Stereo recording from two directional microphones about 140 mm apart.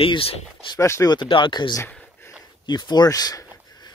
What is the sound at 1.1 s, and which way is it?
Speech, 35° left (ahead or behind).